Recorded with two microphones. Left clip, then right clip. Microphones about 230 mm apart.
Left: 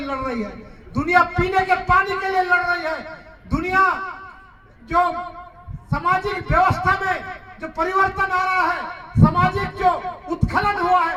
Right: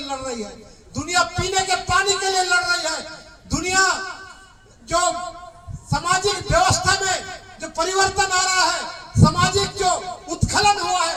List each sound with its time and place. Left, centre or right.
0.0 s a man's voice: right
5.9 s a man's voice: right
9.6 s music: right